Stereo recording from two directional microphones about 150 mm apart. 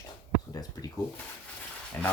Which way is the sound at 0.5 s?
25° left (ahead or behind).